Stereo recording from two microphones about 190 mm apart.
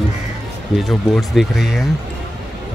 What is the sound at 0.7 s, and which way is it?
Speech, centre (ahead or behind).